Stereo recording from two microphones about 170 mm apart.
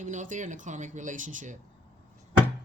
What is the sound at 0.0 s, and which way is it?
Speech, 45° right (ahead or behind).